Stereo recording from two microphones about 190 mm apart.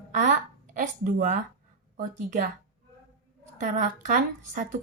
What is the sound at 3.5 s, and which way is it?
A woman's voice, 40° right (ahead or behind).